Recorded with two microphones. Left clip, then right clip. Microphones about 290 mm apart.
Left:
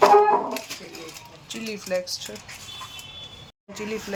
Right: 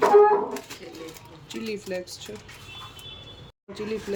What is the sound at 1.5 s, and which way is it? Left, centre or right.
Speech, centre.